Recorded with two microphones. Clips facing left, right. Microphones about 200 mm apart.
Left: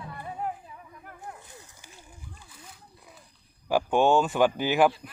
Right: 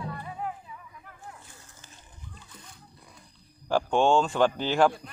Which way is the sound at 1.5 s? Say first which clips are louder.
Left 3 dB; 15° left (ahead or behind).